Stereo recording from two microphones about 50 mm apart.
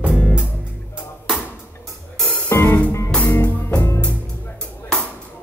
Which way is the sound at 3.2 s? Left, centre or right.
Left.